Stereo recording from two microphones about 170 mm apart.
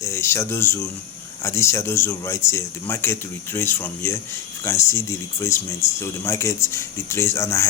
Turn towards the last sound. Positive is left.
turn(degrees=15)  # may be behind; listen again after turning